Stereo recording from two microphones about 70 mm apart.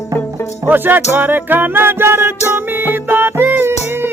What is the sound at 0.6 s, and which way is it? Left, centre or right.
Music, right.